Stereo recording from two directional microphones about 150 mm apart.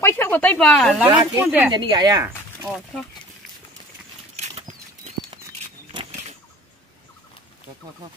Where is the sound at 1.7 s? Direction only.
30° right (ahead or behind).